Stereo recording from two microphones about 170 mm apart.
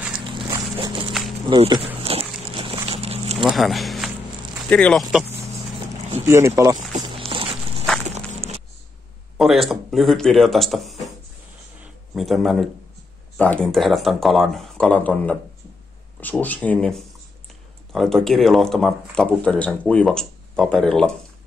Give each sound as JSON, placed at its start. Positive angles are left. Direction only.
{"t": 0.2, "sound": "dog", "side_deg": -30}
{"t": 1.5, "sound": "speech", "side_deg": -30}
{"t": 2.0, "sound": "a sound", "side_deg": -35}
{"t": 3.4, "sound": "speech", "side_deg": 0}
{"t": 6.2, "sound": "speech", "side_deg": -15}
{"t": 7.2, "sound": "music", "side_deg": -35}
{"t": 8.1, "sound": "a sound", "side_deg": -40}
{"t": 9.4, "sound": "speech", "side_deg": 0}
{"t": 12.1, "sound": "speech", "side_deg": 0}